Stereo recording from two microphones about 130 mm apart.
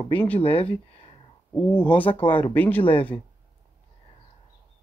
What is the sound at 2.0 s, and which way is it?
Speech, 40° left (ahead or behind).